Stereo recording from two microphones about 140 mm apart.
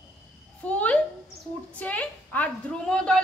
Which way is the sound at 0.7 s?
10° left (ahead or behind).